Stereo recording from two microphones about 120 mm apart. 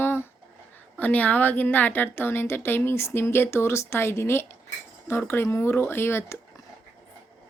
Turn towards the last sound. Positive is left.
turn(degrees=20)  # may be behind; listen again after turning